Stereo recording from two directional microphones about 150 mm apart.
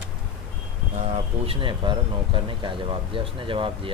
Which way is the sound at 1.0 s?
40° right (ahead or behind).